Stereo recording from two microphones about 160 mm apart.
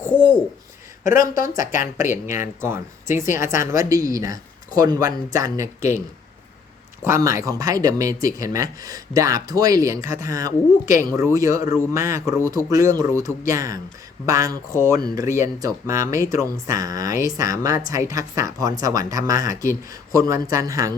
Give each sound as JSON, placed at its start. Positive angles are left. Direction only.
{"t": 1.0, "sound": "speech", "side_deg": 55}
{"t": 2.0, "sound": "speech", "side_deg": -15}
{"t": 7.0, "sound": "speech", "side_deg": -20}